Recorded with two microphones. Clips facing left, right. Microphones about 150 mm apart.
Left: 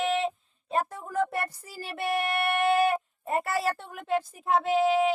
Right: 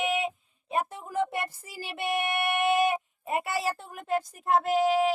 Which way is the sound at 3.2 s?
5° right (ahead or behind).